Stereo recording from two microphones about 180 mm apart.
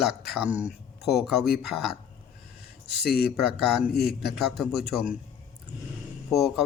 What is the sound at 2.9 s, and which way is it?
Speech, 65° left (ahead or behind).